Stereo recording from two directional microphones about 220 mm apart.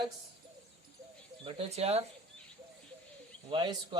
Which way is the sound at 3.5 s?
20° right (ahead or behind).